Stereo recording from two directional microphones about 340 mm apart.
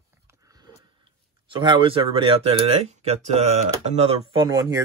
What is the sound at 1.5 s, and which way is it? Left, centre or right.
Speech, centre.